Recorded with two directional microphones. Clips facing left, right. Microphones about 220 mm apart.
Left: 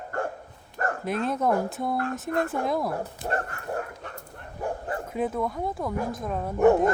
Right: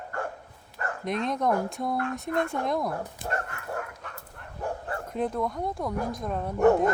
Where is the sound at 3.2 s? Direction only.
35° left (ahead or behind).